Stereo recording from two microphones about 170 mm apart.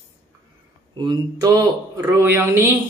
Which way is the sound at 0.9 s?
25° right (ahead or behind).